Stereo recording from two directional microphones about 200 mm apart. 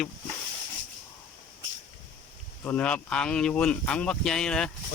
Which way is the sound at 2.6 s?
5° left (ahead or behind).